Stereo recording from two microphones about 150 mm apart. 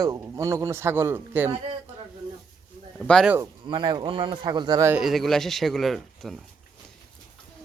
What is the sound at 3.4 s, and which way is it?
A man's voice, 30° right (ahead or behind).